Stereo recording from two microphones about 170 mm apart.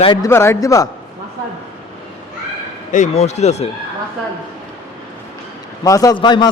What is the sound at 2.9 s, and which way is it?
Speech, 45° left (ahead or behind).